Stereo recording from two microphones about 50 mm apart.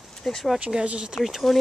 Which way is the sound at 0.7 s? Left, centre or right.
Centre.